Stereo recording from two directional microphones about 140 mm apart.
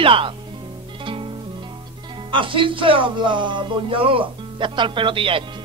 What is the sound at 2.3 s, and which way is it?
Speech, 35° right (ahead or behind).